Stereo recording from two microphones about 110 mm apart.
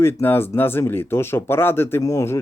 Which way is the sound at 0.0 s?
20° left (ahead or behind).